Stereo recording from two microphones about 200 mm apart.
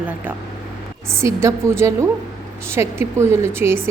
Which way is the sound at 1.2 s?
15° right (ahead or behind).